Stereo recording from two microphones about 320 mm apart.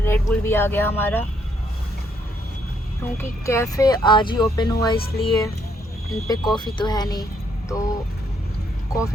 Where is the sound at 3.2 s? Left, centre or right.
Centre.